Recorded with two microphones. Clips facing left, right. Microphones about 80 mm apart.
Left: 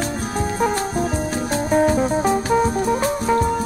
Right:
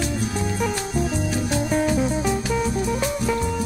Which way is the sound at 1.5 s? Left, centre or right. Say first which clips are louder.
Left 5 dB; left.